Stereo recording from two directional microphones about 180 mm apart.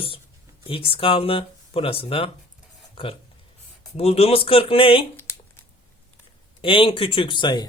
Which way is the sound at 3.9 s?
35° left (ahead or behind).